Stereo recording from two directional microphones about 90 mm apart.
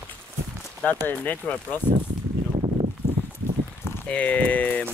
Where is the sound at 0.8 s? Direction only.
20° left (ahead or behind).